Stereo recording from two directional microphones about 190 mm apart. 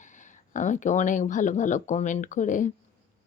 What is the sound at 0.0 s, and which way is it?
Speech, 40° left (ahead or behind).